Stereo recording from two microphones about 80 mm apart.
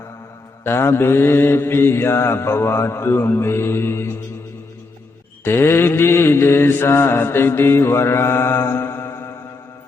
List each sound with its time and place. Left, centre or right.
0.6 s mantra: left
5.5 s mantra: left